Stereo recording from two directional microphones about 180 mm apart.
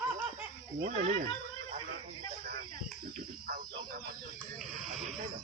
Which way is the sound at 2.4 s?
55° right (ahead or behind).